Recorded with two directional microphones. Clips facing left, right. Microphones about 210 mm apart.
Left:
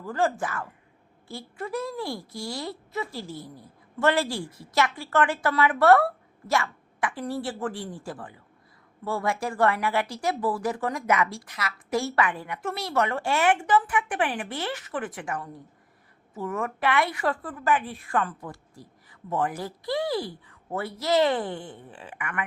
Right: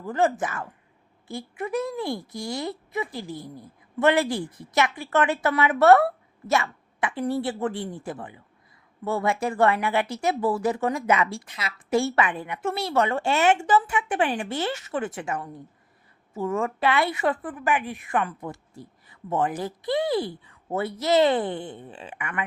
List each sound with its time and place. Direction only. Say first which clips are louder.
0.0 s speech: right 3 dB; 20° right (ahead or behind)